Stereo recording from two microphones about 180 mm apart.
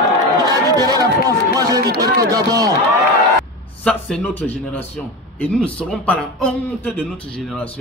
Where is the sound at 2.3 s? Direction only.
20° right (ahead or behind).